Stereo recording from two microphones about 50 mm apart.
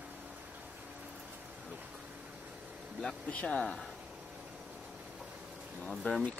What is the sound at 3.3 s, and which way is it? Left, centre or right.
Speech, left.